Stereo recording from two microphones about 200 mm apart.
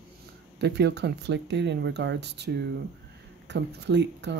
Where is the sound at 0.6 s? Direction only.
60° right (ahead or behind).